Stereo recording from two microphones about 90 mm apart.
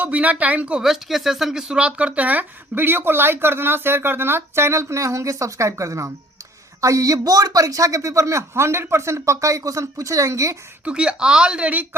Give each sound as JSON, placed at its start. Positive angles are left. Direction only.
{"t": 0.0, "sound": "speech", "side_deg": -15}
{"t": 10.8, "sound": "speech", "side_deg": -10}